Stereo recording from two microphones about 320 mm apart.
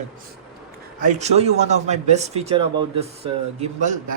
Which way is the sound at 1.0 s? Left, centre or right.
Right.